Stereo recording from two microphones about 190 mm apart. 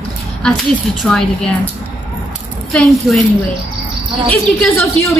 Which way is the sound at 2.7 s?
Centre (ahead or behind).